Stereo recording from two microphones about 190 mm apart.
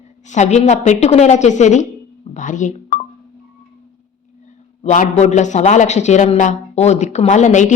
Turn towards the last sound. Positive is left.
turn(degrees=40)  # may be behind; listen again after turning